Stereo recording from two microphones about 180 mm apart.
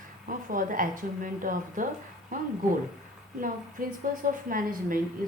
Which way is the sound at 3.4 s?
50° right (ahead or behind).